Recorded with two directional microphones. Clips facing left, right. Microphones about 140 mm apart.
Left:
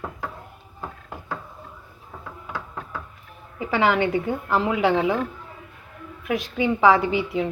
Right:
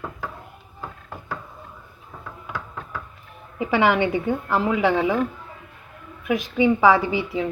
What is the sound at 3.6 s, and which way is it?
A woman's voice, 10° right (ahead or behind).